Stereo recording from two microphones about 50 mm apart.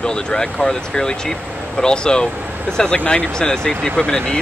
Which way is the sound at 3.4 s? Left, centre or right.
Centre.